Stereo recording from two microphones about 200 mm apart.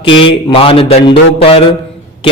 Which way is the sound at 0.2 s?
25° left (ahead or behind).